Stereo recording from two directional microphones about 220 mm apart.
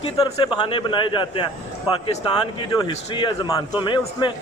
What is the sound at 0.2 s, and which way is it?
A man's voice, 20° left (ahead or behind).